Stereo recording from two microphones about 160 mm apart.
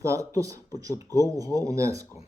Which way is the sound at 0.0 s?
20° right (ahead or behind).